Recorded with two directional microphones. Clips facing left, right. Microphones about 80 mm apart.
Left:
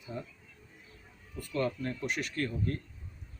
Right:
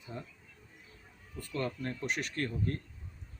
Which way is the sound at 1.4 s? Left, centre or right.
Right.